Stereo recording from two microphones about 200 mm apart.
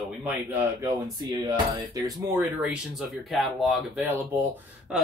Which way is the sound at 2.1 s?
5° right (ahead or behind).